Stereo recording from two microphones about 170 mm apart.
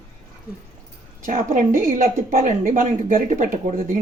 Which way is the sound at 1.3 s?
55° right (ahead or behind).